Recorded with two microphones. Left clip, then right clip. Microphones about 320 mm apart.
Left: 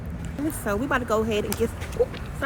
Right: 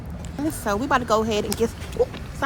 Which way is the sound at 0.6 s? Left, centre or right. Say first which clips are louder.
Right 4 dB; centre.